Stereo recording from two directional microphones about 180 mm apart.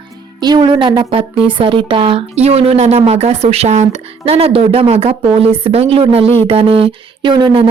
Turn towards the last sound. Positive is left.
turn(degrees=-30)  # may be behind; listen again after turning